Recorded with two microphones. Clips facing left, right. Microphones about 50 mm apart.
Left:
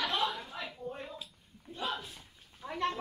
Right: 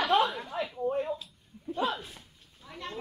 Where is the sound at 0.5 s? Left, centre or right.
Centre.